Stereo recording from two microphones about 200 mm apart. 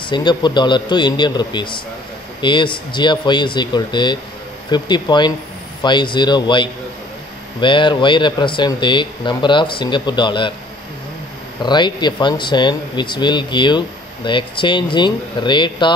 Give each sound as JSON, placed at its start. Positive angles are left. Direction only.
{"t": 0.1, "sound": "speech", "side_deg": 20}
{"t": 11.6, "sound": "speech", "side_deg": 20}